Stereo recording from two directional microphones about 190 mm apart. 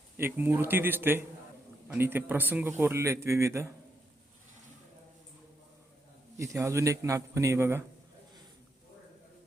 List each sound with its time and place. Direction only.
0.2 s speech: 10° right (ahead or behind)
6.3 s speech: 15° right (ahead or behind)